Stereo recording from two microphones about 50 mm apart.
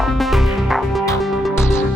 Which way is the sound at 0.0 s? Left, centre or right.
Centre.